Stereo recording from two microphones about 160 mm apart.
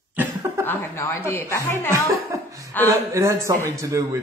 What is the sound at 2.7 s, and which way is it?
Speech, 10° left (ahead or behind).